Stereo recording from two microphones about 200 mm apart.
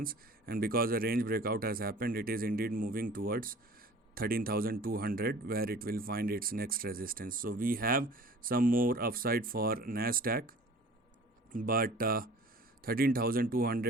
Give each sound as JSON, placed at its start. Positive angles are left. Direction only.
{"t": 0.0, "sound": "speech", "side_deg": -45}
{"t": 11.5, "sound": "speech", "side_deg": -45}